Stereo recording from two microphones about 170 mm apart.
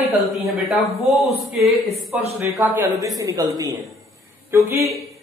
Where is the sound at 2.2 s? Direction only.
15° right (ahead or behind).